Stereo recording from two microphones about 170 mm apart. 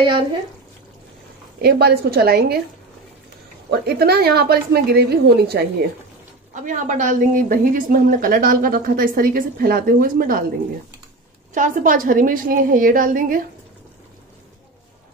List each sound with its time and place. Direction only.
1.6 s a woman's voice: 70° right (ahead or behind)
3.8 s a woman's voice: 65° right (ahead or behind)
6.5 s a woman's voice: 50° right (ahead or behind)
11.5 s a woman's voice: 50° right (ahead or behind)